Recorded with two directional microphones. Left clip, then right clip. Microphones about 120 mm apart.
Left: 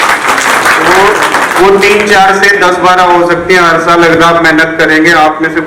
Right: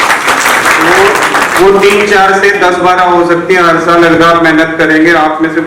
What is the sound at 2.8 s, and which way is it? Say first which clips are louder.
A man's voice: left 2 dB; 35° left (ahead or behind).